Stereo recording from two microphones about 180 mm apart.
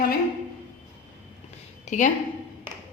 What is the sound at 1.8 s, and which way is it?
Speech, 40° left (ahead or behind).